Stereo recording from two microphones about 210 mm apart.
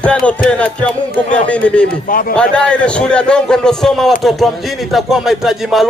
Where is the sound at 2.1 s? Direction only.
45° left (ahead or behind).